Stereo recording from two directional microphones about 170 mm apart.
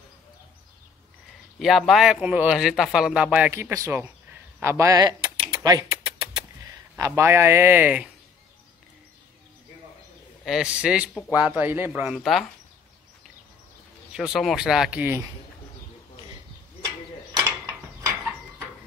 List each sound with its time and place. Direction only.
1.6 s speech: centre (ahead or behind); by 4.1 s 15° right (ahead or behind)
4.6 s a sound: 15° right (ahead or behind)
6.6 s speech: 20° right (ahead or behind)
10.4 s speech: 5° right (ahead or behind)
14.1 s speech: centre (ahead or behind)